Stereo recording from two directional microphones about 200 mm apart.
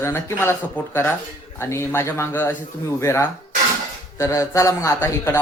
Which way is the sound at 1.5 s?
15° left (ahead or behind).